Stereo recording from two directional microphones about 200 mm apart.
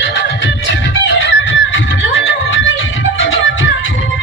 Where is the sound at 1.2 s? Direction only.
65° left (ahead or behind).